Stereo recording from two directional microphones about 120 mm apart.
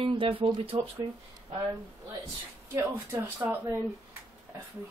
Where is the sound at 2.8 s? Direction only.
15° right (ahead or behind).